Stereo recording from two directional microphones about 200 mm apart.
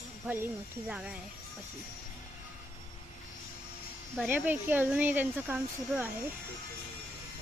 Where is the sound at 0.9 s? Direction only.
5° right (ahead or behind).